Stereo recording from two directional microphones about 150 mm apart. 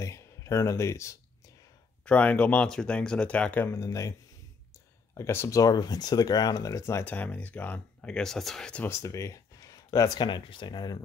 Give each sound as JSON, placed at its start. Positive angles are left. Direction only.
{"t": 0.0, "sound": "speech", "side_deg": 20}
{"t": 8.8, "sound": "speech", "side_deg": 20}